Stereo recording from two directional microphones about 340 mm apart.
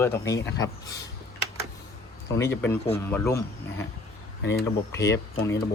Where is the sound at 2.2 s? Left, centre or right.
Centre.